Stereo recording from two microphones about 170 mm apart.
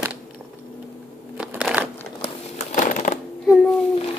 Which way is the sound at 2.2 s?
45° left (ahead or behind).